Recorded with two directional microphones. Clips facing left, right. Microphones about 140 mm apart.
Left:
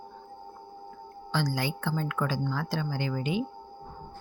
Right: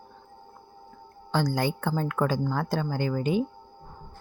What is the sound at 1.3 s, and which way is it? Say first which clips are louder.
Speech: right 4 dB; 45° right (ahead or behind).